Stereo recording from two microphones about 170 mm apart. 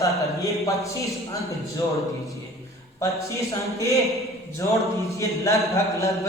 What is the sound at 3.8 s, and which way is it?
A man's voice, 20° left (ahead or behind).